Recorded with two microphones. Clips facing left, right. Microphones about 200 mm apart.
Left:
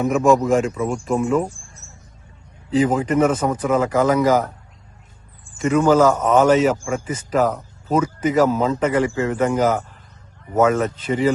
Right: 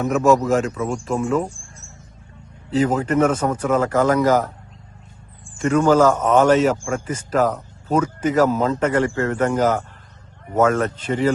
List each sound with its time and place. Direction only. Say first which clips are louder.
0.0 s speech: left 1 dB; centre (ahead or behind)
2.8 s a man's voice: even; 10° left (ahead or behind)
5.6 s a man's voice: even; 10° left (ahead or behind)